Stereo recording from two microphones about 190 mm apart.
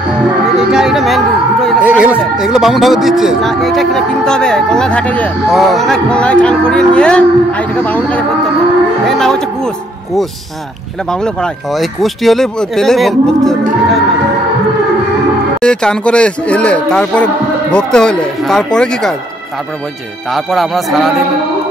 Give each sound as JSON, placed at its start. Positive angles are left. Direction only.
{"t": 0.6, "sound": "speech", "side_deg": -5}
{"t": 11.1, "sound": "speech", "side_deg": 5}
{"t": 15.6, "sound": "speech", "side_deg": 5}
{"t": 20.2, "sound": "speech", "side_deg": 0}